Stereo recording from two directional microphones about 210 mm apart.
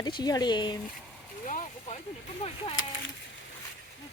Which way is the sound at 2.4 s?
30° left (ahead or behind).